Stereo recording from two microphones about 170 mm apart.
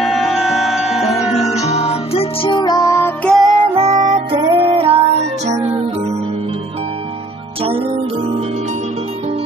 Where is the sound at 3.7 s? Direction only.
20° right (ahead or behind); by 5.5 s 35° right (ahead or behind).